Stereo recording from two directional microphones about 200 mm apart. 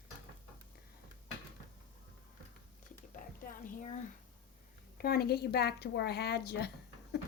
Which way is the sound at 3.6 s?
40° left (ahead or behind).